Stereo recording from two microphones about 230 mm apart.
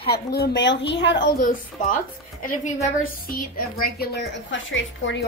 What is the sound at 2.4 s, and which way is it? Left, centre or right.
A woman's voice, left.